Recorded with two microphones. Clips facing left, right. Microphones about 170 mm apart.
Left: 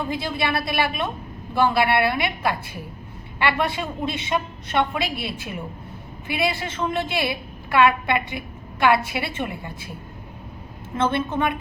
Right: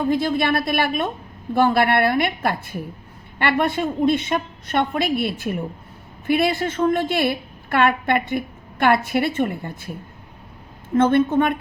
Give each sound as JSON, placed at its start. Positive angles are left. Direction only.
{"t": 0.1, "sound": "a woman's voice", "side_deg": -50}
{"t": 10.9, "sound": "a woman's voice", "side_deg": -50}